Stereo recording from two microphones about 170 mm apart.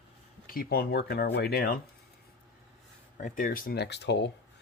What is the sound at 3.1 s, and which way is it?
Speech, 50° left (ahead or behind).